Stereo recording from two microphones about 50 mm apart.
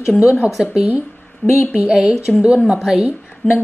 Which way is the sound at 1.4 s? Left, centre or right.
Left.